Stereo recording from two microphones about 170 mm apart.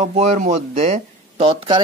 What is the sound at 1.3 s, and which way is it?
Speech, 35° right (ahead or behind).